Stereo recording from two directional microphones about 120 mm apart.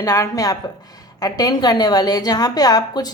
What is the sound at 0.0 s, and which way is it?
A woman's voice, 25° left (ahead or behind).